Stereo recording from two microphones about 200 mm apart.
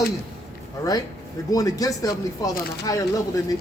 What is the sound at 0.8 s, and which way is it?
A man's voice, 20° left (ahead or behind).